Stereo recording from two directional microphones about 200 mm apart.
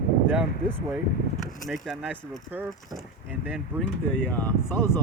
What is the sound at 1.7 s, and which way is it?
Speech, centre (ahead or behind).